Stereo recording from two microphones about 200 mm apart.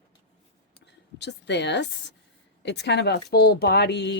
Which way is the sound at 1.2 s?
60° left (ahead or behind).